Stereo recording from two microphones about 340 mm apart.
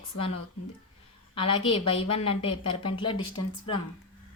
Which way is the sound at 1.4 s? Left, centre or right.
Centre.